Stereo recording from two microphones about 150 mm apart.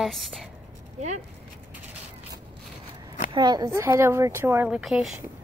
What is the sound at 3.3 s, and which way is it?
Speech, 25° right (ahead or behind).